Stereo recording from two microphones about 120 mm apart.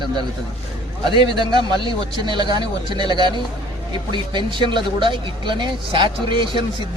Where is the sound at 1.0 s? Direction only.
40° right (ahead or behind).